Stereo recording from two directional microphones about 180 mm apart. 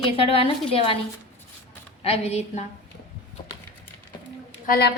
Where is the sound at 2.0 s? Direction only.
35° left (ahead or behind).